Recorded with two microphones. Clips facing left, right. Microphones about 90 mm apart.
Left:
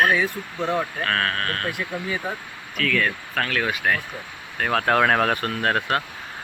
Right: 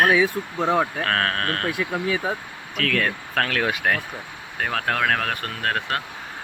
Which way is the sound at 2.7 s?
60° right (ahead or behind).